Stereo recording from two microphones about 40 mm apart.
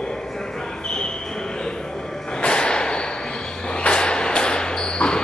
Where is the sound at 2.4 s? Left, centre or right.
Left.